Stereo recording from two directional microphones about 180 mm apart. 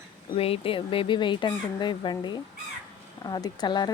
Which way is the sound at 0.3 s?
30° left (ahead or behind).